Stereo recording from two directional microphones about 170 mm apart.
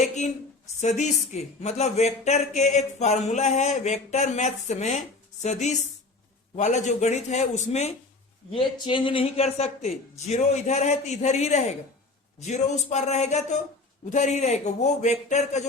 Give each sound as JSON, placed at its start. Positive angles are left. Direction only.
{"t": 0.8, "sound": "speech", "side_deg": 45}
{"t": 8.5, "sound": "speech", "side_deg": 30}